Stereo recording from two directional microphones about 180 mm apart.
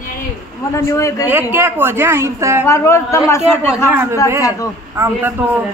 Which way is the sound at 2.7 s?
15° left (ahead or behind).